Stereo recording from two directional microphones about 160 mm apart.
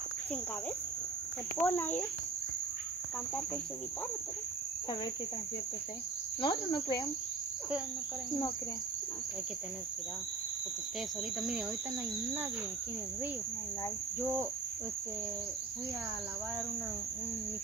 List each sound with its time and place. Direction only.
1.6 s speech: 10° left (ahead or behind)
6.4 s speech: 30° left (ahead or behind)